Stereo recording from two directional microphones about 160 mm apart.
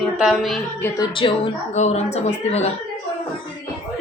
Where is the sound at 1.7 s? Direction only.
45° left (ahead or behind).